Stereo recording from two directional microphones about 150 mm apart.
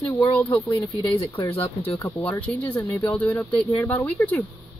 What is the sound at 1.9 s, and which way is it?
Speech, 25° left (ahead or behind).